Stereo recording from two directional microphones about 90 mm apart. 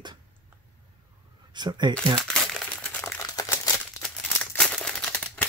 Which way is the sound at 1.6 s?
55° right (ahead or behind).